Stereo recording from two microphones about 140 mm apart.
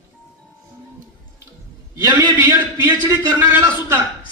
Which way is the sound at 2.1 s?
20° right (ahead or behind).